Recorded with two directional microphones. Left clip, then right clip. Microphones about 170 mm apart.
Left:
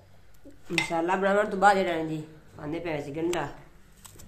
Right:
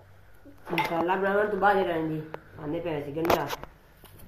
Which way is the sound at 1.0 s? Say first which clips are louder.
Left 2 dB; 30° left (ahead or behind).